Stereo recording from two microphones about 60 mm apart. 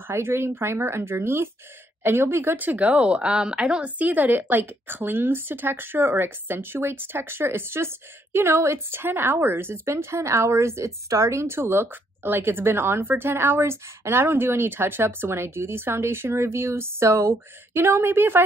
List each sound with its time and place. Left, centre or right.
0.1 s speech: right; by 3.9 s centre
4.0 s speech: right